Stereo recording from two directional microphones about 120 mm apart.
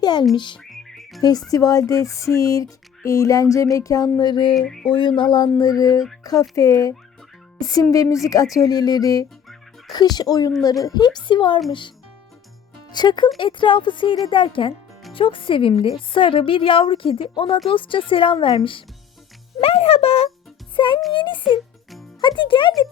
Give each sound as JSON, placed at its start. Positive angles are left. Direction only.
{"t": 0.0, "sound": "speech", "side_deg": 35}
{"t": 0.6, "sound": "music", "side_deg": 5}
{"t": 1.2, "sound": "speech", "side_deg": 35}
{"t": 4.5, "sound": "music", "side_deg": 5}
{"t": 4.9, "sound": "speech", "side_deg": 45}
{"t": 12.9, "sound": "a woman's voice", "side_deg": 35}
{"t": 20.7, "sound": "a woman's voice", "side_deg": 45}